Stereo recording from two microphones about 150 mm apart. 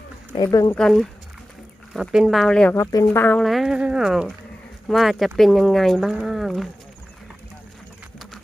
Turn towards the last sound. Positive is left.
turn(degrees=0)  # may be behind; listen again after turning